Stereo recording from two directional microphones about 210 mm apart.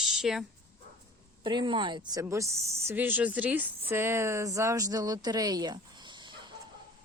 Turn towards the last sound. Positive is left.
turn(degrees=-20)  # may be behind; listen again after turning